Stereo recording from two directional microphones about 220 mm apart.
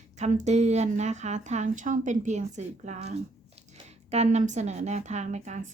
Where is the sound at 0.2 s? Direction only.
30° right (ahead or behind).